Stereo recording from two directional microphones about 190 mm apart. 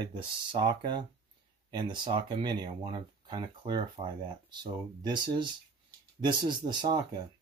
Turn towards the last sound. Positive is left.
turn(degrees=-25)  # may be behind; listen again after turning